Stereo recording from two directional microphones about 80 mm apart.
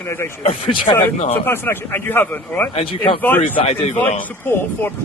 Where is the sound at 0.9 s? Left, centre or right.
Left.